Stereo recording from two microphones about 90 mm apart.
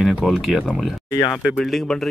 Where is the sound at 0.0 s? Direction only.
5° right (ahead or behind).